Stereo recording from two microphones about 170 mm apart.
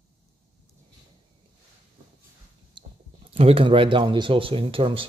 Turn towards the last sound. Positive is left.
turn(degrees=-30)  # may be behind; listen again after turning